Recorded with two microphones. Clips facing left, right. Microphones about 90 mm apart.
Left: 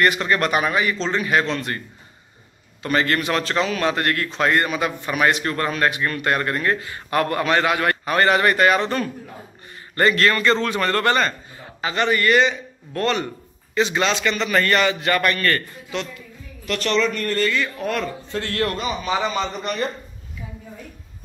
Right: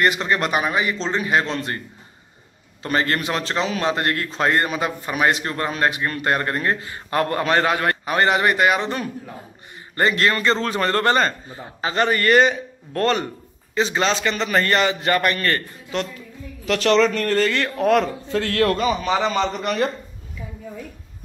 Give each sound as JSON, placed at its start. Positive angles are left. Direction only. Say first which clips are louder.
{"t": 0.0, "sound": "a man's voice", "louder": "left 1 dB", "side_deg": -25}
{"t": 2.8, "sound": "a man's voice", "louder": "left 1 dB", "side_deg": -30}
{"t": 8.0, "sound": "a man's voice", "louder": "left 2 dB", "side_deg": -20}
{"t": 13.7, "sound": "a man's voice", "louder": "even", "side_deg": -25}
{"t": 16.6, "sound": "speech", "louder": "right 4 dB", "side_deg": -90}